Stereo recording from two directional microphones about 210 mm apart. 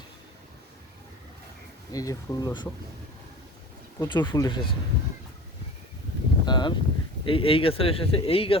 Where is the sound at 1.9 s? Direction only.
15° left (ahead or behind).